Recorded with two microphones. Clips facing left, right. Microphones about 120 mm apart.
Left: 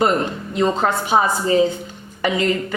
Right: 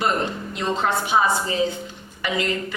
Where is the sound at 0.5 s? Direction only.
40° left (ahead or behind).